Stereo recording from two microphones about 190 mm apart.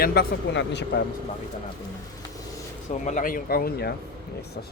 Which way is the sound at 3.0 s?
40° left (ahead or behind).